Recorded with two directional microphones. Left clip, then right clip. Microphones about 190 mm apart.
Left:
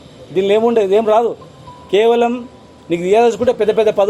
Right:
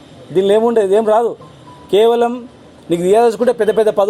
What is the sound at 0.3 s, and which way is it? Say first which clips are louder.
A man's voice: right 1 dB; 35° right (ahead or behind).